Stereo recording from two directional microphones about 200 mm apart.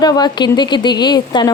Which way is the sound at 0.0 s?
20° left (ahead or behind).